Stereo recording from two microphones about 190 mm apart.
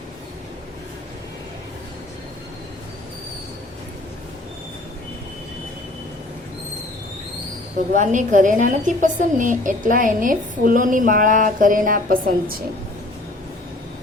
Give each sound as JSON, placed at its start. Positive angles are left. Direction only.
{"t": 7.9, "sound": "a woman's voice", "side_deg": -40}